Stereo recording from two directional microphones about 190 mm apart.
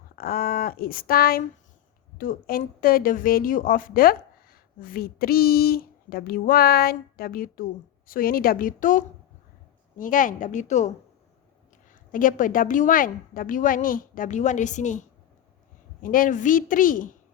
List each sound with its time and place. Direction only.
0.2 s a woman's voice: 50° left (ahead or behind)
12.1 s a woman's voice: 45° left (ahead or behind)
16.0 s a woman's voice: 45° left (ahead or behind)